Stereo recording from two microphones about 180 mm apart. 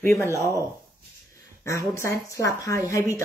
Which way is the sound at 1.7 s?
15° left (ahead or behind).